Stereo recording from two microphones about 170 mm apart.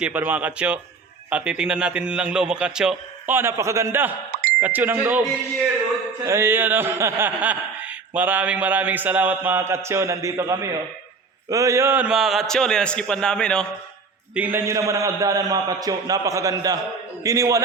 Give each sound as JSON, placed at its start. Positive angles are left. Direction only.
{"t": 0.0, "sound": "a man's voice", "side_deg": -10}
{"t": 6.2, "sound": "a man's voice", "side_deg": -15}
{"t": 14.3, "sound": "a man's voice", "side_deg": -10}